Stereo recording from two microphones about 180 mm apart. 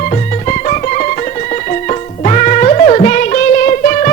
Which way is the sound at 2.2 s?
40° left (ahead or behind).